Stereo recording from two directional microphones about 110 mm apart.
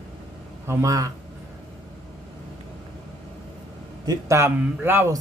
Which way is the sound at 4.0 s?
30° right (ahead or behind).